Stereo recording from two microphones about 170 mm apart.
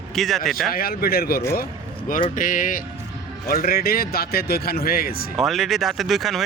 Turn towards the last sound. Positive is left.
turn(degrees=0)  # may be behind; listen again after turning